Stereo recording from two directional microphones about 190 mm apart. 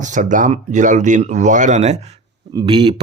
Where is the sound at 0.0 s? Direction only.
40° right (ahead or behind).